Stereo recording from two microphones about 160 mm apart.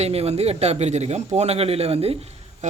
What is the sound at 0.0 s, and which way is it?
A man's voice, 40° right (ahead or behind).